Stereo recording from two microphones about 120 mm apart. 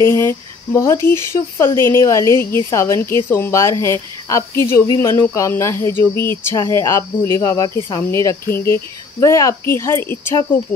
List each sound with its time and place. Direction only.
0.0 s speech: 20° left (ahead or behind)